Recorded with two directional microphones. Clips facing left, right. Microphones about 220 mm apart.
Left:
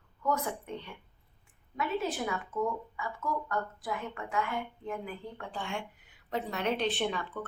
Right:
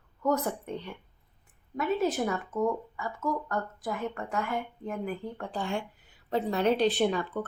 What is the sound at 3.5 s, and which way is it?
Speech, 40° right (ahead or behind).